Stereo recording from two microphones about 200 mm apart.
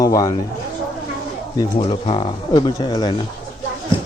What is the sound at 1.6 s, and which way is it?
Speech, 25° left (ahead or behind).